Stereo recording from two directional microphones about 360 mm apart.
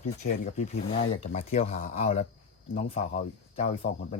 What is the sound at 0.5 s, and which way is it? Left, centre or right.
Speech, centre.